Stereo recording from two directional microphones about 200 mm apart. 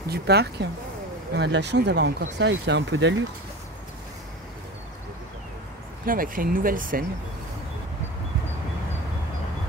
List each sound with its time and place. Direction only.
0.1 s speech: 55° right (ahead or behind)
6.0 s speech: 45° right (ahead or behind)